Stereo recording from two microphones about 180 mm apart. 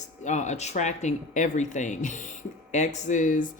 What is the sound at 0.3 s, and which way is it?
Speech, 40° left (ahead or behind).